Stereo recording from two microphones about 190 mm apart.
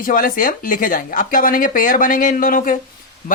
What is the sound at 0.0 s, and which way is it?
Speech, 50° left (ahead or behind).